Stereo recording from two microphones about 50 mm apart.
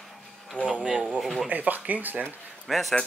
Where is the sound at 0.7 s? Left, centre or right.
Right.